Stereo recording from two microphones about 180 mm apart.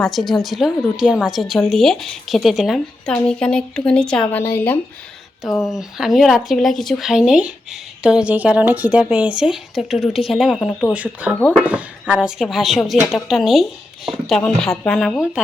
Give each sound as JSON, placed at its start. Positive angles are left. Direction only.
{"t": 0.0, "sound": "speech", "side_deg": 0}
{"t": 5.7, "sound": "speech", "side_deg": 0}
{"t": 10.9, "sound": "speech", "side_deg": -5}